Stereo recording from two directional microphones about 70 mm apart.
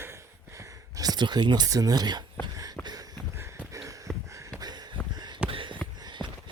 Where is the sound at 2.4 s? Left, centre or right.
Right.